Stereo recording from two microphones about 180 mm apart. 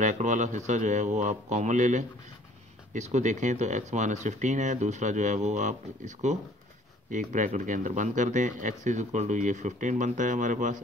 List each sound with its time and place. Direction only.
0.0 s speech: 45° right (ahead or behind)